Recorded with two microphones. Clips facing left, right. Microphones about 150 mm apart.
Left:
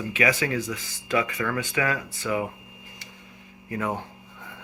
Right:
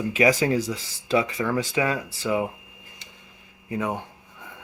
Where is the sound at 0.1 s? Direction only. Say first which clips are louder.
Right 5 dB; 40° right (ahead or behind).